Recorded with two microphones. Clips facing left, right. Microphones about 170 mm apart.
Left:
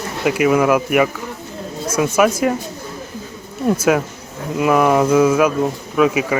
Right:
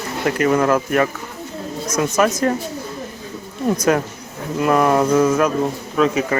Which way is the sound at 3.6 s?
5° left (ahead or behind).